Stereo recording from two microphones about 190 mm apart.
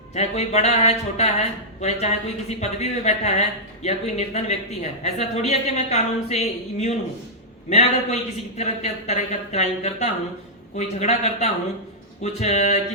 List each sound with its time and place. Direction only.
0.1 s speech: 35° left (ahead or behind)